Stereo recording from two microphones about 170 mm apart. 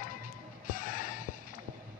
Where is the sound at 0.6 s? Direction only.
55° left (ahead or behind).